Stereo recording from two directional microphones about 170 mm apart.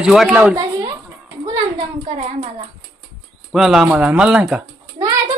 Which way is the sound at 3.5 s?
Centre (ahead or behind).